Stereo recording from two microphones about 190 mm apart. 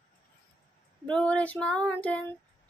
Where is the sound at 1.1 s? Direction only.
5° left (ahead or behind).